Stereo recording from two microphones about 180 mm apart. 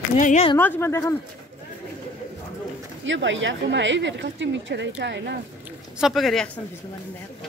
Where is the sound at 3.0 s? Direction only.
90° right; by 5.3 s 75° right (ahead or behind).